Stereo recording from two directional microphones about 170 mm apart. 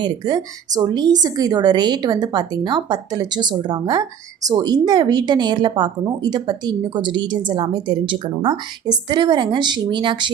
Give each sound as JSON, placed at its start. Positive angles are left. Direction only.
{"t": 0.0, "sound": "a woman's voice", "side_deg": -25}